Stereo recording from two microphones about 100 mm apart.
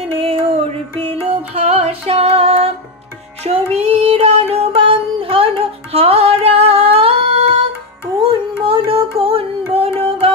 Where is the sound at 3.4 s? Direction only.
90° right; by 7.1 s 75° right (ahead or behind).